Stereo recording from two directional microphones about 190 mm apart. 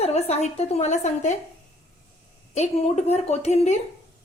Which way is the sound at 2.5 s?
35° left (ahead or behind).